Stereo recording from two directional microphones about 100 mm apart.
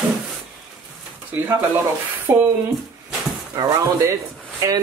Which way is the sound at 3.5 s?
40° right (ahead or behind).